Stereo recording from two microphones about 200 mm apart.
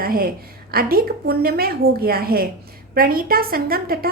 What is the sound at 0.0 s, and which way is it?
A woman's voice, 45° right (ahead or behind).